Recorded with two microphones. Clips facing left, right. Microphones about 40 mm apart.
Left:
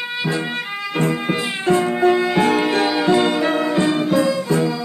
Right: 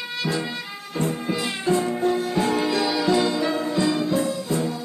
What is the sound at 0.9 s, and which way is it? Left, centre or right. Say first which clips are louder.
Music: left 5 dB; left.